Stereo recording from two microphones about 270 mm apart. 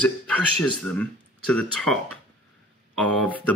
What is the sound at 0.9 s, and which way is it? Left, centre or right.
Speech, left.